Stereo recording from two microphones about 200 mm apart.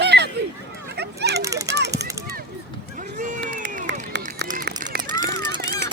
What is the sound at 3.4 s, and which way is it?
Run, 60° right (ahead or behind).